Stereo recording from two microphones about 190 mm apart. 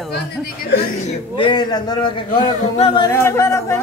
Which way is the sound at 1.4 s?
25° left (ahead or behind).